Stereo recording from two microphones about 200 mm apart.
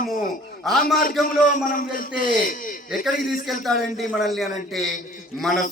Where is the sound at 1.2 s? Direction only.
45° left (ahead or behind).